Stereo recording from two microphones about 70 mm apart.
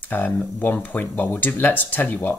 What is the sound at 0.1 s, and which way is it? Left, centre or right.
Speech, left.